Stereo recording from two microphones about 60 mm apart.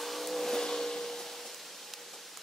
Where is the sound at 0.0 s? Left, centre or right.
Centre.